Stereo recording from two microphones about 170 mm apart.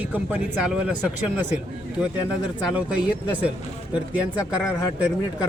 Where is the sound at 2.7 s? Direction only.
10° right (ahead or behind).